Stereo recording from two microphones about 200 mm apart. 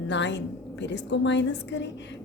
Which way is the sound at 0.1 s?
60° left (ahead or behind).